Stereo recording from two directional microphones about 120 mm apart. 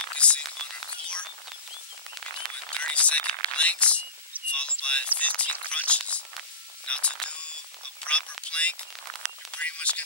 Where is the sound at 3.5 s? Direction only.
10° left (ahead or behind).